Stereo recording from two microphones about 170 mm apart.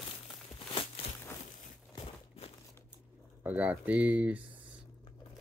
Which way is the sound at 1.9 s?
35° left (ahead or behind).